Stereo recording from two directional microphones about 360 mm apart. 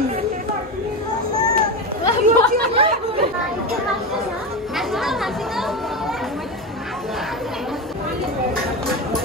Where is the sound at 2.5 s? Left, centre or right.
Centre.